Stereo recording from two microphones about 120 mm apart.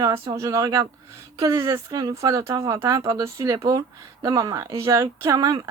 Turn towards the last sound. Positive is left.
turn(degrees=-30)  # may be behind; listen again after turning